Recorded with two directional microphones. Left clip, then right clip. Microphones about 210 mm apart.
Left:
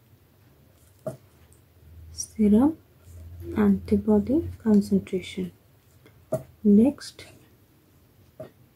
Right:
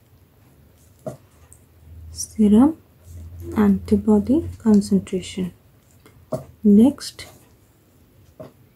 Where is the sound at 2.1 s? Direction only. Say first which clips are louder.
Right 5 dB; 10° right (ahead or behind).